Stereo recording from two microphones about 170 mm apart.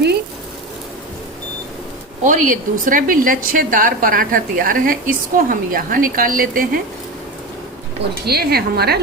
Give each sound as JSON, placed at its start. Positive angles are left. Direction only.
{"t": 2.2, "sound": "a woman's voice", "side_deg": -50}
{"t": 8.2, "sound": "a woman's voice", "side_deg": -65}